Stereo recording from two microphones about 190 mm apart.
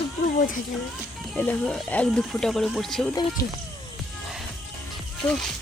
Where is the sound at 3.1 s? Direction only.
20° left (ahead or behind).